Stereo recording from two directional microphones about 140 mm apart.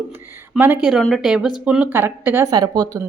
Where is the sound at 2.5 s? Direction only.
30° right (ahead or behind).